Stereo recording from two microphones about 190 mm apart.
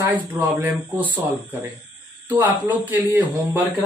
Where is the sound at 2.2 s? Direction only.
10° right (ahead or behind).